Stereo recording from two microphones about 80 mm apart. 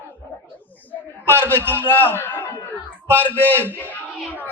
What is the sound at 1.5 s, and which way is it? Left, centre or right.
A man's voice, left.